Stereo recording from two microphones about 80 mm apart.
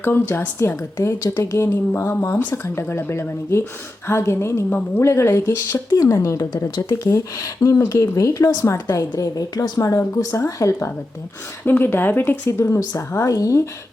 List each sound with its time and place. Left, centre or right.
0.0 s a woman's voice: left
6.7 s a woman's voice: left